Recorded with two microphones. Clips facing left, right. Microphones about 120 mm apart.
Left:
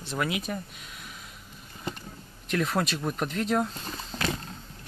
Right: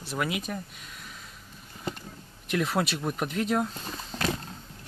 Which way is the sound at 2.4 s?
5° right (ahead or behind).